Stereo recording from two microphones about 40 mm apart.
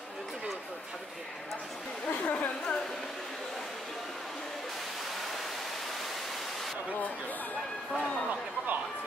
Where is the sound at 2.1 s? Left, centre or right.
Left.